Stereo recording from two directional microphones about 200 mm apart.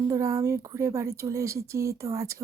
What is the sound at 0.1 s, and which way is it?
Speech, 15° right (ahead or behind).